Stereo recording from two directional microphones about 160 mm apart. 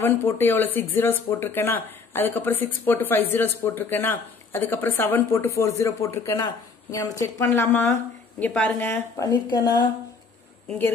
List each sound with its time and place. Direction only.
0.0 s speech: 15° left (ahead or behind)